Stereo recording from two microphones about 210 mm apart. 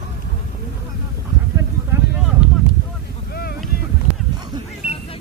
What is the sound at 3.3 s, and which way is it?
Boat, 45° left (ahead or behind).